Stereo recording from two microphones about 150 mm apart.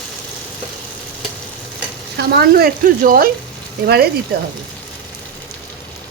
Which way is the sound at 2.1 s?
90° right.